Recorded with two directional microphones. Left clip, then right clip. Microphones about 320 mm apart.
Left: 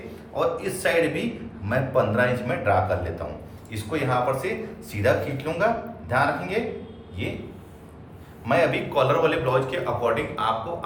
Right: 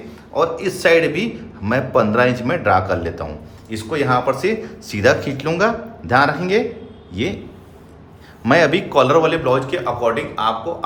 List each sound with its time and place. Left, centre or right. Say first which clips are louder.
0.3 s speech: right 6 dB; right
8.4 s speech: right 7 dB; right